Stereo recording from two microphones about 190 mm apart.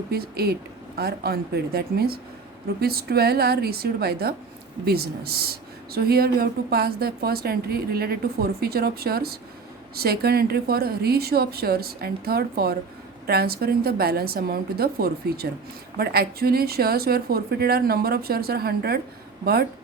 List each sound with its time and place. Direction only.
0.1 s speech: 55° right (ahead or behind)